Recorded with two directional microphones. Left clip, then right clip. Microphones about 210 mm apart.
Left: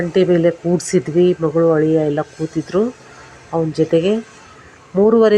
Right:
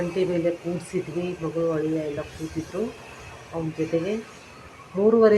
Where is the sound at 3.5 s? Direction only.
25° left (ahead or behind).